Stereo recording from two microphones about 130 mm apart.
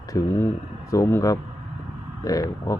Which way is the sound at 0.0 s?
20° left (ahead or behind).